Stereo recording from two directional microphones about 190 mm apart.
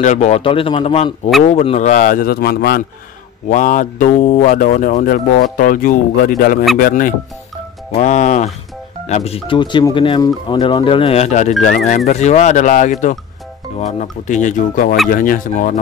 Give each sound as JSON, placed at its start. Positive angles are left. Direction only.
{"t": 0.0, "sound": "speech", "side_deg": 40}
{"t": 3.4, "sound": "speech", "side_deg": 45}